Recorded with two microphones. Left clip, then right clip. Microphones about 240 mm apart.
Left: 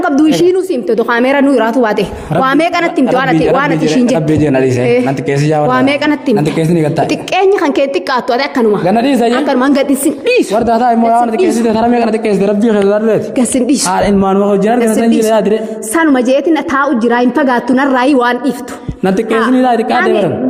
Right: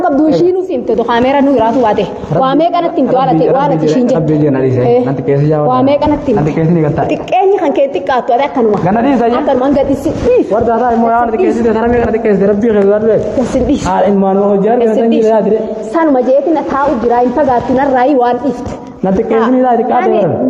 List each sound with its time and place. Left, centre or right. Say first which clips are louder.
0.9 s a woman's voice: right 1 dB; left
4.3 s a woman's voice: even; left
5.7 s a woman's voice: right 1 dB; left
8.9 s a woman's voice: even; left
9.5 s a woman's voice: right 1 dB; left
19.0 s a woman's voice: right 1 dB; left